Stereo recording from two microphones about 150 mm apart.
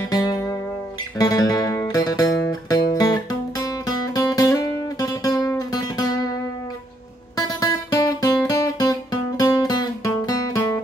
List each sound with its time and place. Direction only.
0.1 s music: 25° left (ahead or behind)
7.3 s music: 25° left (ahead or behind)